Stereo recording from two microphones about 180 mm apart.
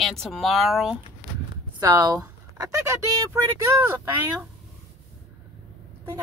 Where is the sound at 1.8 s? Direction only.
20° right (ahead or behind).